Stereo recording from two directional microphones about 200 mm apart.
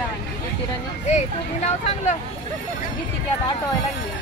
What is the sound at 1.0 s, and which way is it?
Speech, 35° left (ahead or behind).